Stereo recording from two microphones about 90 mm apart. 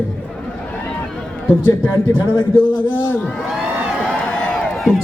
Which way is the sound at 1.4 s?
25° left (ahead or behind).